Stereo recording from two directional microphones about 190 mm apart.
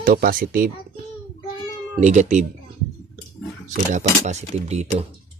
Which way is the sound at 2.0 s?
40° right (ahead or behind).